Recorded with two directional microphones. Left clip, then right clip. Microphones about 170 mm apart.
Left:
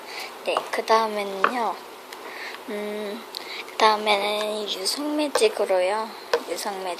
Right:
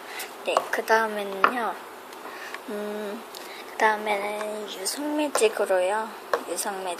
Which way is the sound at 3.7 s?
20° left (ahead or behind).